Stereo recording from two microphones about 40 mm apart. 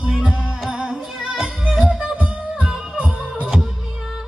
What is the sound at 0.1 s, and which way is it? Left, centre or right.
Music, centre.